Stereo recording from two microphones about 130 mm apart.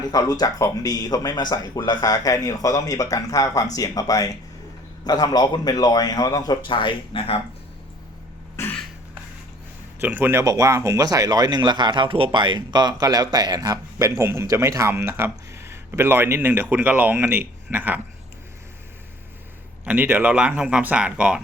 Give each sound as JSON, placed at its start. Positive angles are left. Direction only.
{"t": 0.1, "sound": "a man's voice", "side_deg": 30}
{"t": 8.6, "sound": "cough", "side_deg": 20}
{"t": 10.0, "sound": "speech", "side_deg": -15}
{"t": 19.8, "sound": "speech", "side_deg": -15}